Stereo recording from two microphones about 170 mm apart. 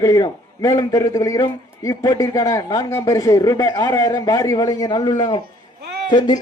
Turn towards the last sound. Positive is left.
turn(degrees=25)  # may be behind; listen again after turning